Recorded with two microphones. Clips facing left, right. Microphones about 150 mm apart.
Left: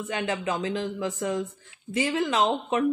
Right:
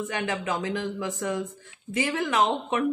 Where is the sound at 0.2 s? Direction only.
20° left (ahead or behind).